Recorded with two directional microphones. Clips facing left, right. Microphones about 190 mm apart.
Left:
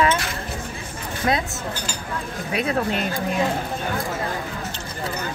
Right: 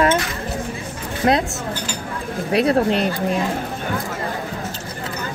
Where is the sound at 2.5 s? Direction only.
35° right (ahead or behind).